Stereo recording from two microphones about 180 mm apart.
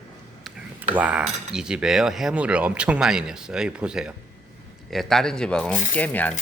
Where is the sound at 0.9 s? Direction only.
5° right (ahead or behind); by 6.4 s 10° left (ahead or behind).